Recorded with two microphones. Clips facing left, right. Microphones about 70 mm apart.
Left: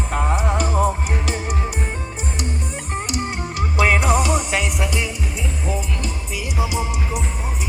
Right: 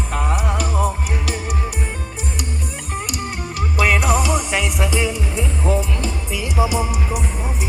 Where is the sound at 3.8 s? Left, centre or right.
Left.